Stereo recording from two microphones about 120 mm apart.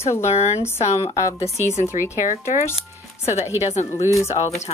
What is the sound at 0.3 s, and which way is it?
Speech, 65° left (ahead or behind).